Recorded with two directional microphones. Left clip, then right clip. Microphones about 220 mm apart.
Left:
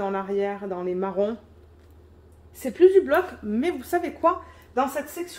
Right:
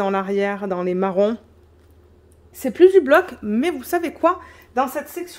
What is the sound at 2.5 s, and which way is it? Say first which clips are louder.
Speech: right 4 dB; 55° right (ahead or behind).